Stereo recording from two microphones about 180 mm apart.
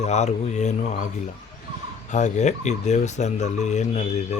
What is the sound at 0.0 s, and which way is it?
Speech, 40° left (ahead or behind).